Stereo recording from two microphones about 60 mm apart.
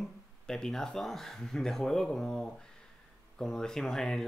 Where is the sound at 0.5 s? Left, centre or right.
Centre.